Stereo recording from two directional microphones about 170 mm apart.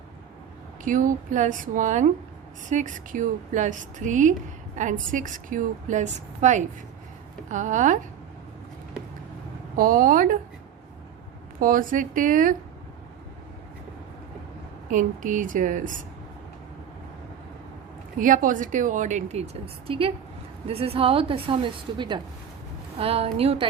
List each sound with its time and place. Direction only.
0.9 s speech: 50° right (ahead or behind)
9.7 s speech: 55° right (ahead or behind)
11.6 s speech: 55° right (ahead or behind)
14.8 s speech: 50° right (ahead or behind)
18.2 s a woman's voice: 50° right (ahead or behind); by 23.6 s 35° right (ahead or behind)